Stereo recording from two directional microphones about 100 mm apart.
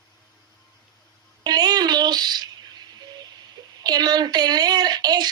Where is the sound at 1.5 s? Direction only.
45° right (ahead or behind).